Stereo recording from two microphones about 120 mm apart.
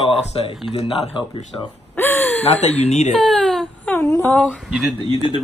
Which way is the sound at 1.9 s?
20° left (ahead or behind).